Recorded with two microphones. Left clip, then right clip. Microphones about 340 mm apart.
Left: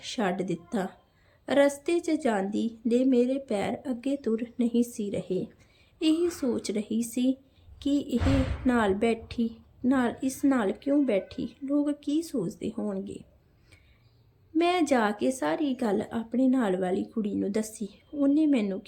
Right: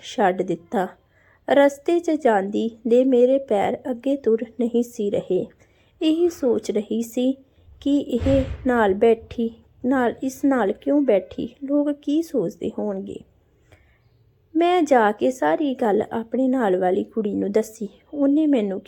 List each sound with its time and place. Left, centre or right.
0.1 s a woman's voice: centre
14.5 s a woman's voice: centre